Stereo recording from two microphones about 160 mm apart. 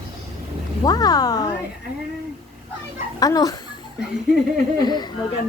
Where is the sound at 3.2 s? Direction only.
20° left (ahead or behind).